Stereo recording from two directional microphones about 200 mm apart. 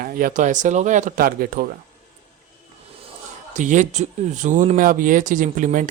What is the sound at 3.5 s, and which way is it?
Speech, 40° right (ahead or behind).